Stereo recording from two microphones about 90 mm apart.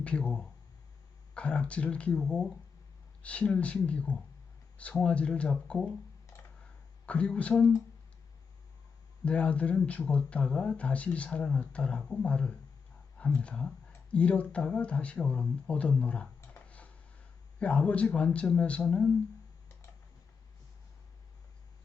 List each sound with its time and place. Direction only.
0.0 s speech: 15° left (ahead or behind)
3.2 s speech: 15° left (ahead or behind)
7.0 s speech: 15° left (ahead or behind)
9.2 s speech: 15° left (ahead or behind)
16.6 s tick-tock: 15° left (ahead or behind)
17.6 s speech: 15° left (ahead or behind)